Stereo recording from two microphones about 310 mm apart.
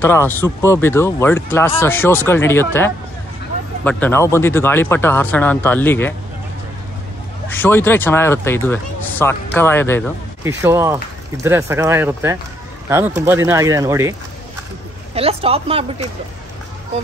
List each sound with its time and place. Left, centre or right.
0.0 s speech: centre
3.8 s speech: centre
7.4 s speech: centre
10.4 s speech: centre
15.1 s speech: centre